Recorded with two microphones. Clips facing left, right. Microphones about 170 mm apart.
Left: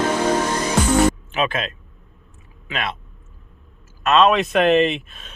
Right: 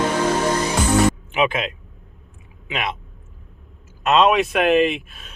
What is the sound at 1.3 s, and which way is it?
Speech, 15° right (ahead or behind).